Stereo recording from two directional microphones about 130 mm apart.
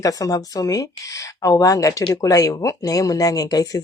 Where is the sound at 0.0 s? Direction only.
25° left (ahead or behind).